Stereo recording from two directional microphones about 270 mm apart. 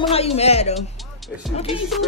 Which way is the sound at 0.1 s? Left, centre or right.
Left.